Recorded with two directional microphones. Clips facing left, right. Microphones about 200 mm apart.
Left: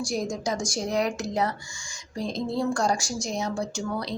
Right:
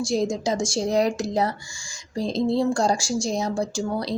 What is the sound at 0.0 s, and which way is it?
A woman's voice, 25° right (ahead or behind).